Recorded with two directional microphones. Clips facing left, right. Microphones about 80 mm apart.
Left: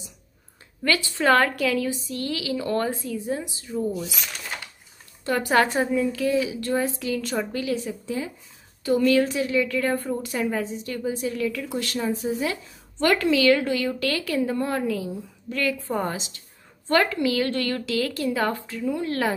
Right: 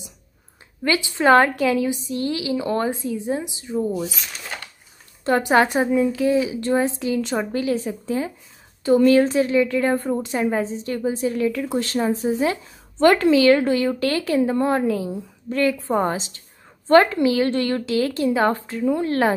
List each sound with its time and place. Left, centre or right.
0.8 s a woman's voice: centre
5.4 s a woman's voice: right